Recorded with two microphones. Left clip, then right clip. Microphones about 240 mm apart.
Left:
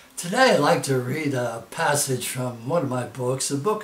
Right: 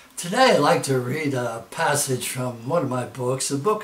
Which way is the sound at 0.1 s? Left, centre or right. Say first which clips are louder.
Right 1 dB; centre.